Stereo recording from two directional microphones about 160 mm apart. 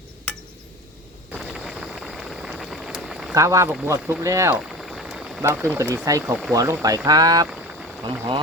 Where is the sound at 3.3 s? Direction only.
20° right (ahead or behind).